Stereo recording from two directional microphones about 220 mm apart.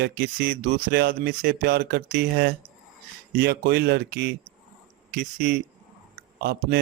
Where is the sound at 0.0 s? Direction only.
45° right (ahead or behind).